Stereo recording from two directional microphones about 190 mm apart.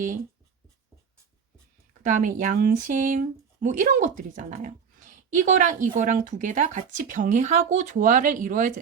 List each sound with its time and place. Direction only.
2.0 s speech: 40° right (ahead or behind)